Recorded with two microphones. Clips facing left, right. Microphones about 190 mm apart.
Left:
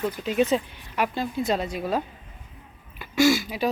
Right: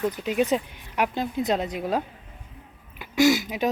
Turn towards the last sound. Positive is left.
turn(degrees=-15)  # may be behind; listen again after turning